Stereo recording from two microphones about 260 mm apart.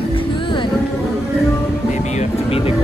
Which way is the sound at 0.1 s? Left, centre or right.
Centre.